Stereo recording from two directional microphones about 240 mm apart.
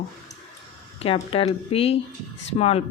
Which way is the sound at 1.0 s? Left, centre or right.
Left.